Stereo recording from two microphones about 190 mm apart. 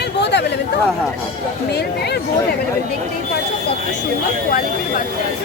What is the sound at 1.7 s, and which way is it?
Speech, 60° left (ahead or behind).